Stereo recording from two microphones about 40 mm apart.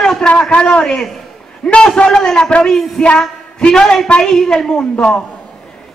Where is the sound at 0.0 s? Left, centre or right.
Centre.